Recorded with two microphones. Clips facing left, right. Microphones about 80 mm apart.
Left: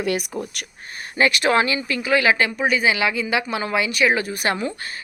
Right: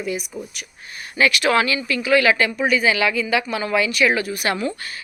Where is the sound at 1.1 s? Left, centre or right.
Left.